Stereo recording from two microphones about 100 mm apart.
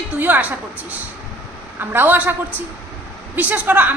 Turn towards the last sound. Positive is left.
turn(degrees=-15)  # may be behind; listen again after turning